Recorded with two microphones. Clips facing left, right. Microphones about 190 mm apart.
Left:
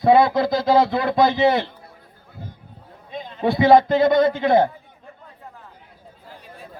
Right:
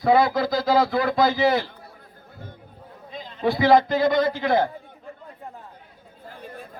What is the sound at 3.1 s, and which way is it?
A man's voice, 25° left (ahead or behind).